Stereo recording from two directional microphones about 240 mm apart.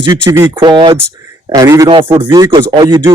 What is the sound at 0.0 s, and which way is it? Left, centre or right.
Speech, centre.